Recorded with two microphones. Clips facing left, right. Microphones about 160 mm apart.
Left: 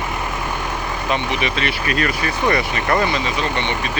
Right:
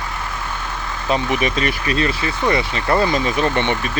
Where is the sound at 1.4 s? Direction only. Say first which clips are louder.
Right 2 dB; 45° right (ahead or behind).